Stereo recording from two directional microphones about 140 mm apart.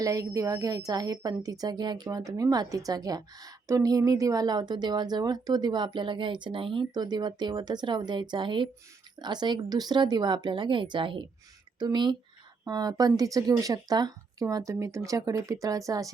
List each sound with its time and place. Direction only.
0.0 s a woman's voice: 25° right (ahead or behind)